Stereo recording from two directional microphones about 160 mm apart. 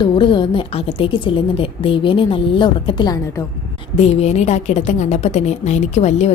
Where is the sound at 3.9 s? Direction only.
40° left (ahead or behind).